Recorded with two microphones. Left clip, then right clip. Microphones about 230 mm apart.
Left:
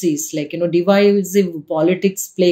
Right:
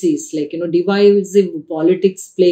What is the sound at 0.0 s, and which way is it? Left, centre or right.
Speech, left.